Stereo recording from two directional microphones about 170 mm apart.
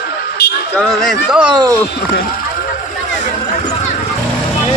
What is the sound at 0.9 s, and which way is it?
Speech, centre (ahead or behind).